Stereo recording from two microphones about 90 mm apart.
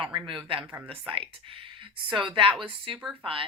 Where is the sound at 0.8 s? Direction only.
85° right.